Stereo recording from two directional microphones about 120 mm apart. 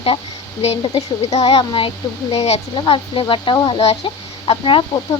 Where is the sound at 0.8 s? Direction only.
50° left (ahead or behind).